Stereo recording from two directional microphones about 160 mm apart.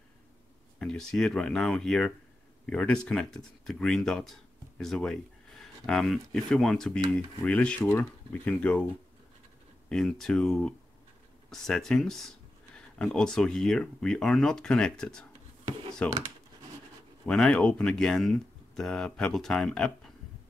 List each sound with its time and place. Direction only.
0.7 s speech: 5° left (ahead or behind)
9.8 s speech: 5° left (ahead or behind)
17.3 s speech: 5° left (ahead or behind)